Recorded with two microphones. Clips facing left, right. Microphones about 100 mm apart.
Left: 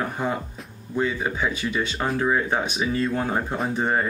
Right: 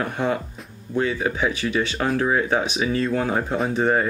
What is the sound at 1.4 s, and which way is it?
Speech, 15° right (ahead or behind).